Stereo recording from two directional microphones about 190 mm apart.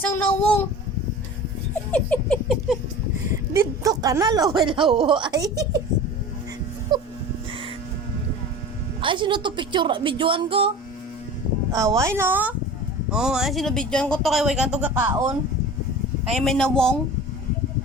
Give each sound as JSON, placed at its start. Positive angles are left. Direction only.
{"t": 0.0, "sound": "speech", "side_deg": 10}
{"t": 1.9, "sound": "speech", "side_deg": 5}
{"t": 3.5, "sound": "a woman's voice", "side_deg": -15}
{"t": 6.9, "sound": "music", "side_deg": -20}
{"t": 9.0, "sound": "a woman's voice", "side_deg": -25}
{"t": 11.7, "sound": "speech", "side_deg": -15}
{"t": 16.3, "sound": "speech", "side_deg": 0}